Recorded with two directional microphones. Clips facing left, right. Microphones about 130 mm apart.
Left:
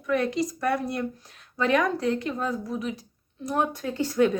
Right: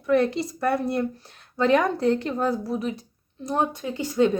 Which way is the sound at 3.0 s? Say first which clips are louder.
Even; 25° right (ahead or behind).